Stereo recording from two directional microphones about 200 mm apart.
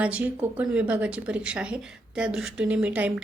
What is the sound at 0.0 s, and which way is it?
A woman's voice, 5° right (ahead or behind).